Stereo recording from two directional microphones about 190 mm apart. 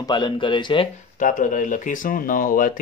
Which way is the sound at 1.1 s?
45° left (ahead or behind).